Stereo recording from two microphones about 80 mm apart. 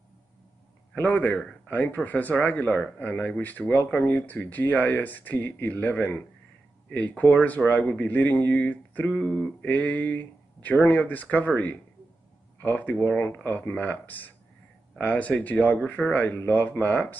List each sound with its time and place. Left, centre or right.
1.1 s speech: centre